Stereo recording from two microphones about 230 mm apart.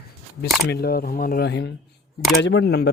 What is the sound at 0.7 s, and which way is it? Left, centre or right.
Speech, left.